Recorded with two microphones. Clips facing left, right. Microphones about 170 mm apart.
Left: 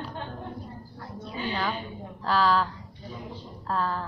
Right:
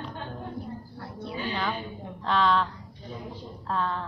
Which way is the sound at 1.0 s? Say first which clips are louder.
Left 1 dB; 65° right (ahead or behind).